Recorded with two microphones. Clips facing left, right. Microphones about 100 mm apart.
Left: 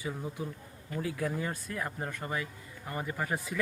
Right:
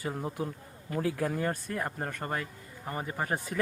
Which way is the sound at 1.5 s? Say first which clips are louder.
Right 3 dB; 40° right (ahead or behind).